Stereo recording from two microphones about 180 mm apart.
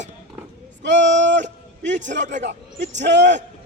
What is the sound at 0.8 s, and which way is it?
Speech, 85° right.